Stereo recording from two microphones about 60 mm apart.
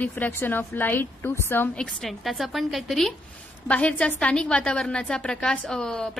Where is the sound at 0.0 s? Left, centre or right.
Left.